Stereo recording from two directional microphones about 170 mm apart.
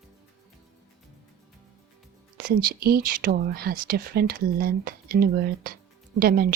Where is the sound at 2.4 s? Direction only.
60° right (ahead or behind).